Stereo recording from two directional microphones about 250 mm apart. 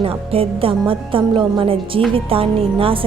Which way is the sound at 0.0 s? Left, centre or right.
Right.